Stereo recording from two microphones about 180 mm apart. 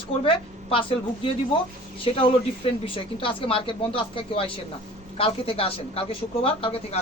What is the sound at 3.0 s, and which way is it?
A woman's voice, 30° left (ahead or behind).